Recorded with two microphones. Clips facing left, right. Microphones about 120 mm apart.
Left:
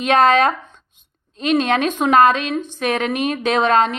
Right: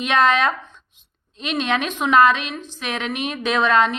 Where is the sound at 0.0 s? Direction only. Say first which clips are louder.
Left 4 dB; 40° left (ahead or behind).